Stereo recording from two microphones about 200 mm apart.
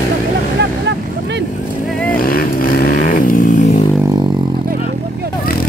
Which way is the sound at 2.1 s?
45° left (ahead or behind).